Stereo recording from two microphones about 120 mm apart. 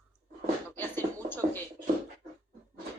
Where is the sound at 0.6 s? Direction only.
15° left (ahead or behind).